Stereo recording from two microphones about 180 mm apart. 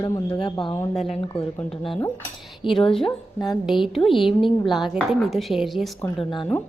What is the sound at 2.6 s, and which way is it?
Speech, 30° left (ahead or behind).